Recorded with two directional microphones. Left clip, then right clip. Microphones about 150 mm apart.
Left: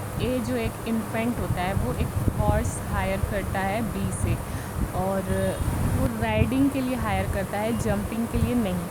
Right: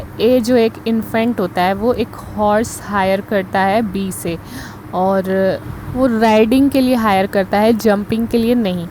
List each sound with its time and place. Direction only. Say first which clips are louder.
0.2 s speech: right 16 dB; 55° right (ahead or behind)
5.1 s speech: right 12 dB; 45° right (ahead or behind)
6.2 s speech: right 12 dB; 60° right (ahead or behind)